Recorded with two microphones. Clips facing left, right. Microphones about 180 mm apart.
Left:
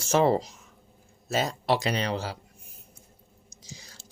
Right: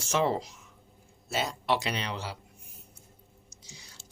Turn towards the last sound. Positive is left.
turn(degrees=90)